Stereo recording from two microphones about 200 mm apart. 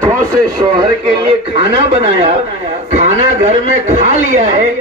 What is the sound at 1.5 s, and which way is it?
A man's voice, 30° right (ahead or behind).